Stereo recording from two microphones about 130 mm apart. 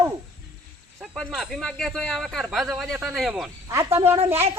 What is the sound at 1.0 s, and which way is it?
A man's voice, 5° right (ahead or behind).